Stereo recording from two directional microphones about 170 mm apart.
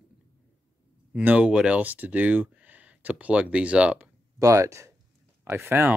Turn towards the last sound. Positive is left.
turn(degrees=-10)  # may be behind; listen again after turning